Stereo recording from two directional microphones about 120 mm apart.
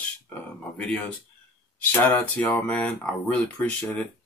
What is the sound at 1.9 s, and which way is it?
Speech, 15° left (ahead or behind).